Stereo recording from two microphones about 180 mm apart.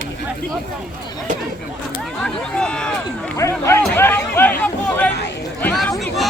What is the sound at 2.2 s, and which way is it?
Speech, 5° left (ahead or behind).